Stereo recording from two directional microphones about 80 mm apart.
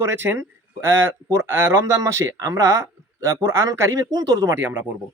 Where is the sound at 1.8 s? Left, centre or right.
Right.